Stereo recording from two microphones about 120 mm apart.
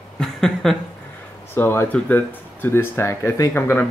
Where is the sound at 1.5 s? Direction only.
20° left (ahead or behind).